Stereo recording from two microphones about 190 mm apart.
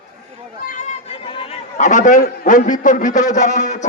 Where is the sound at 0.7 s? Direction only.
40° left (ahead or behind).